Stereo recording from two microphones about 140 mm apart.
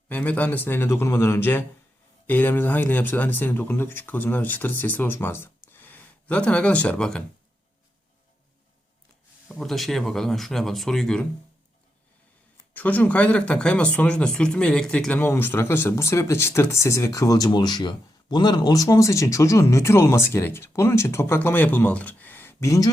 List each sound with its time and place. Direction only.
0.1 s speech: 10° left (ahead or behind)
5.6 s a sound: 15° left (ahead or behind)
9.5 s speech: centre (ahead or behind)
12.7 s speech: 10° left (ahead or behind)